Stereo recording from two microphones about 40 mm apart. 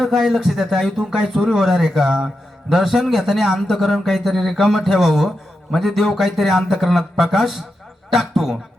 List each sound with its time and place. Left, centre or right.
0.0 s a man's voice: centre